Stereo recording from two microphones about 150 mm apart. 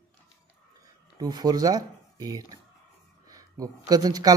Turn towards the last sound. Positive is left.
turn(degrees=-25)  # may be behind; listen again after turning